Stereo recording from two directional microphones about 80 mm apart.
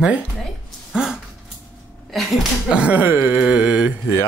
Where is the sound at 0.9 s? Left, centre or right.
Centre.